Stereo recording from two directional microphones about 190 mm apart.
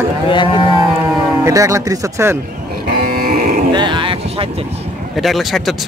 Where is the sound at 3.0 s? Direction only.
50° right (ahead or behind).